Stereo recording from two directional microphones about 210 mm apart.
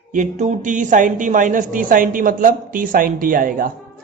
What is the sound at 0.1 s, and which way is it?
A man's voice, 35° right (ahead or behind).